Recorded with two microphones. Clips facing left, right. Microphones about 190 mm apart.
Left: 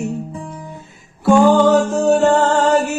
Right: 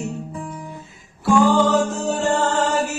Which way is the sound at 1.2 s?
65° left (ahead or behind).